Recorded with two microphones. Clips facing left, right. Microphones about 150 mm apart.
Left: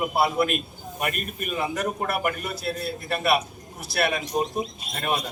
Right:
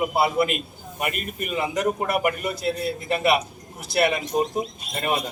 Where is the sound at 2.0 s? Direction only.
20° right (ahead or behind).